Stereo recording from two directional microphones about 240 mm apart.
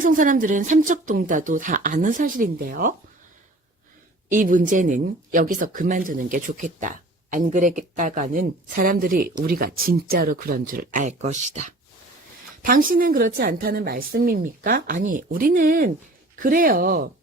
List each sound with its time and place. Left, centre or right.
0.0 s speech: right
4.3 s speech: right
12.6 s speech: right